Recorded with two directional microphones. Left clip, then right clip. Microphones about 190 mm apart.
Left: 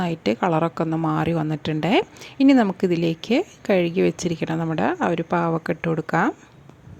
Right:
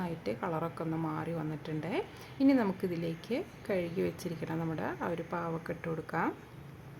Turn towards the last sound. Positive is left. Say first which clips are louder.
# left 13 dB
turn(degrees=40)  # may be behind; listen again after turning